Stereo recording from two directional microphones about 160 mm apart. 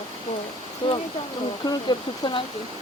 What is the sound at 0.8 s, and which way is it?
Speech, 35° left (ahead or behind).